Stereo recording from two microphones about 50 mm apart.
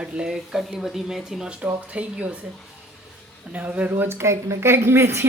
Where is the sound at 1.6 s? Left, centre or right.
Right.